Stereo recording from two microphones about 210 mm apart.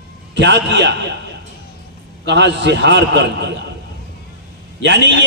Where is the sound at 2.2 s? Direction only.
55° right (ahead or behind).